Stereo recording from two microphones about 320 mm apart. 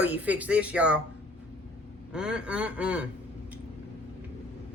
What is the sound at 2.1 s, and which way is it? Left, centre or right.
Speech, centre.